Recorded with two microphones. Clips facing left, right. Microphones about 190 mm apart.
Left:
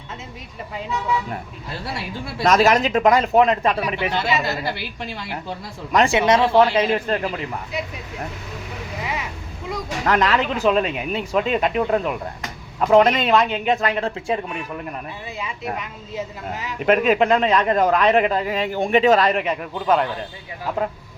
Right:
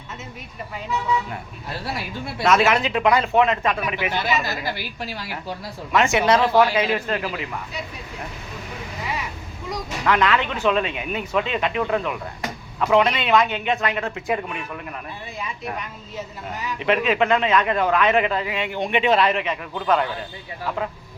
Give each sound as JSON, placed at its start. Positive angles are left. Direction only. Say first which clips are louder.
{"t": 2.0, "sound": "a man's voice", "louder": "left 1 dB", "side_deg": 35}
{"t": 5.9, "sound": "a man's voice", "louder": "left 2 dB", "side_deg": 35}
{"t": 6.1, "sound": "a man's voice", "louder": "left 1 dB", "side_deg": 25}
{"t": 10.1, "sound": "a man's voice", "louder": "left 1 dB", "side_deg": 40}
{"t": 13.3, "sound": "speech", "louder": "left 1 dB", "side_deg": 0}
{"t": 13.7, "sound": "a man's voice", "louder": "left 3 dB", "side_deg": 35}
{"t": 16.8, "sound": "a man's voice", "louder": "left 4 dB", "side_deg": 45}
{"t": 19.7, "sound": "a man's voice", "louder": "left 1 dB", "side_deg": 10}